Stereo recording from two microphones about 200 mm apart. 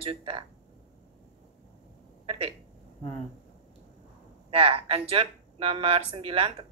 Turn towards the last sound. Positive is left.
turn(degrees=-25)  # may be behind; listen again after turning